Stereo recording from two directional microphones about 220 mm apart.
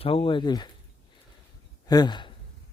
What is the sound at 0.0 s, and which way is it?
Speech, 25° left (ahead or behind).